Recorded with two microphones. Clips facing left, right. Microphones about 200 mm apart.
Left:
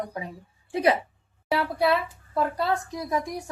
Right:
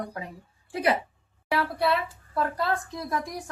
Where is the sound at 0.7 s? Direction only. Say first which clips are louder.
Left 3 dB; 25° left (ahead or behind).